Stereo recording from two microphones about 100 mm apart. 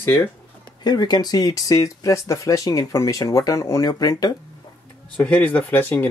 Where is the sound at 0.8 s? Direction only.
45° left (ahead or behind).